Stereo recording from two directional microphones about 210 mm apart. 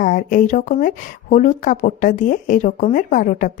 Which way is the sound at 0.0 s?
40° left (ahead or behind).